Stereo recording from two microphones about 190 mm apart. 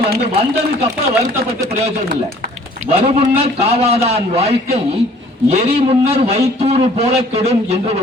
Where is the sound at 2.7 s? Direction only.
35° right (ahead or behind).